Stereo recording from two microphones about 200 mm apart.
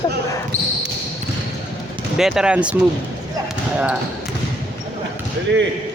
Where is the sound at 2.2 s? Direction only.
Centre (ahead or behind).